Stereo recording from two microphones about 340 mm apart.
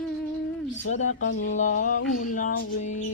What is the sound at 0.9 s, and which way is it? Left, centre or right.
Speech, left.